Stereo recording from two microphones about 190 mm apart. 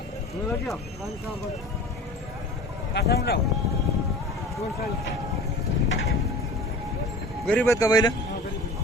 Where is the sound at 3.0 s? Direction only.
55° left (ahead or behind).